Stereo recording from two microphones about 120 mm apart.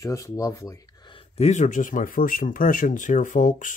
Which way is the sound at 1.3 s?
80° left.